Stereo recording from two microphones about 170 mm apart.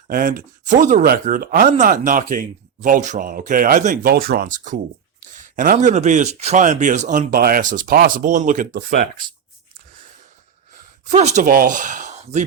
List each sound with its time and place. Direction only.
0.1 s speech: 55° right (ahead or behind)
11.1 s speech: 40° right (ahead or behind)